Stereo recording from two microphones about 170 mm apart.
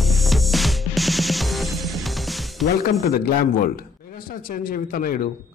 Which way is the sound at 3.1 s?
60° left (ahead or behind).